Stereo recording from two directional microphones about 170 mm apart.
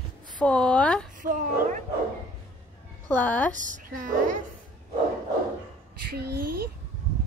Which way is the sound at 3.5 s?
50° right (ahead or behind).